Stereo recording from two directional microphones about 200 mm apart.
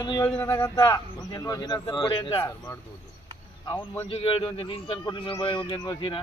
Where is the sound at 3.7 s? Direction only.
15° left (ahead or behind).